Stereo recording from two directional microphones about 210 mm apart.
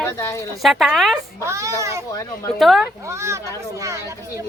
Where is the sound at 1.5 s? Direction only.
15° right (ahead or behind).